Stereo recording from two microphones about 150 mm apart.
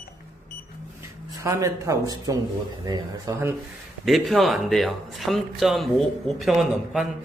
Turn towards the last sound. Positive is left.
turn(degrees=0)  # may be behind; listen again after turning